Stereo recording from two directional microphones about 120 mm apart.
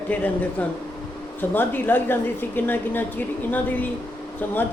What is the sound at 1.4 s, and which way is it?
Speech, 15° left (ahead or behind).